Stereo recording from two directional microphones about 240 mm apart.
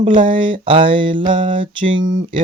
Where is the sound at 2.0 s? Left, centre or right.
Right.